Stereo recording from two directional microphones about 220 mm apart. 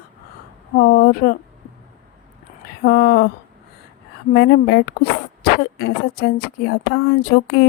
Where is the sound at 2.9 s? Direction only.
45° left (ahead or behind).